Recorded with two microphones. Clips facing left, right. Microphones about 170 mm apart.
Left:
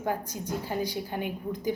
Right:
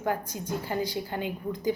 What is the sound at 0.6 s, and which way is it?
Speech, 15° left (ahead or behind).